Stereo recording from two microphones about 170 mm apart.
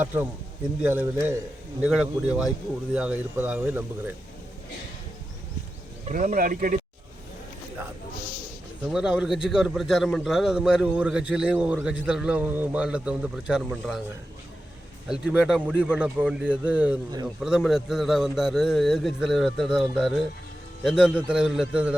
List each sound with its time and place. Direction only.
0.0 s speech: 10° right (ahead or behind)
6.1 s speech: 50° right (ahead or behind)
8.8 s speech: 5° right (ahead or behind)
15.1 s speech: 5° right (ahead or behind)